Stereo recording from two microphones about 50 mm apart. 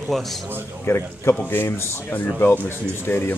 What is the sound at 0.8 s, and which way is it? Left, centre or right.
Speech, left.